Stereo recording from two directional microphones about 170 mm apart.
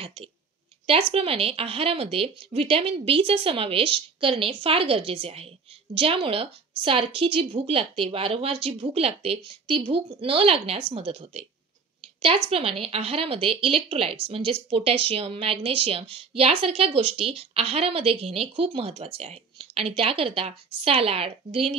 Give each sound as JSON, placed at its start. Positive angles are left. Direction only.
{"t": 0.0, "sound": "a woman's voice", "side_deg": -35}
{"t": 12.4, "sound": "speech", "side_deg": -35}